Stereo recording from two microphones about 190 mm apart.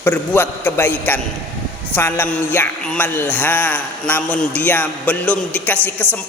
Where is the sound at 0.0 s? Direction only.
10° left (ahead or behind).